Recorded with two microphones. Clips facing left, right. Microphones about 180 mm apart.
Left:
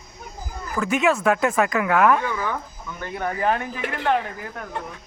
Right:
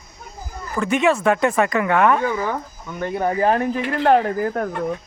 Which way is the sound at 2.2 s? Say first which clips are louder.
Right 4 dB; 30° right (ahead or behind).